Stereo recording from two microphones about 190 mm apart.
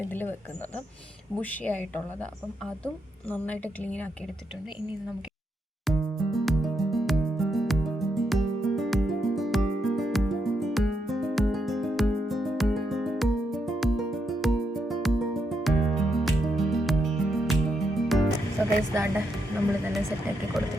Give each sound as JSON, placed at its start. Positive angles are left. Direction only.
{"t": 0.1, "sound": "a woman's voice", "side_deg": 10}
{"t": 1.4, "sound": "a woman's voice", "side_deg": 10}
{"t": 5.8, "sound": "music", "side_deg": 0}
{"t": 18.9, "sound": "a woman's voice", "side_deg": -15}
{"t": 20.6, "sound": "speech", "side_deg": 0}